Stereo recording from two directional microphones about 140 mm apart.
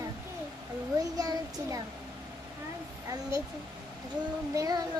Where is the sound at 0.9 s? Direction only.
25° right (ahead or behind).